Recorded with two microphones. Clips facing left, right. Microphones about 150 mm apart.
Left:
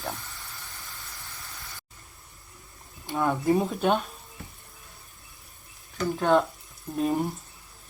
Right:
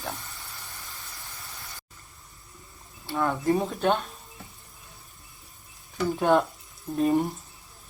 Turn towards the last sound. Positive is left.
turn(degrees=0)  # may be behind; listen again after turning